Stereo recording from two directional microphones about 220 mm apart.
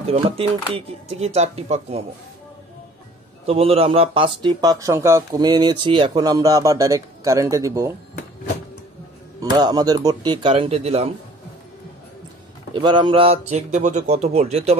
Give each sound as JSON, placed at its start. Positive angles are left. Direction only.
{"t": 0.0, "sound": "speech", "side_deg": -25}
{"t": 3.4, "sound": "speech", "side_deg": -25}
{"t": 9.4, "sound": "speech", "side_deg": -20}
{"t": 12.7, "sound": "speech", "side_deg": -20}